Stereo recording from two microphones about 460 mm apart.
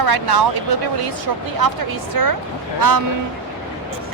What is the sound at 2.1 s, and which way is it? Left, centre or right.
Speech, right.